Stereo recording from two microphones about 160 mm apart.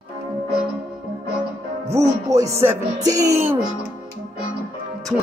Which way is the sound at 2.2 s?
20° right (ahead or behind).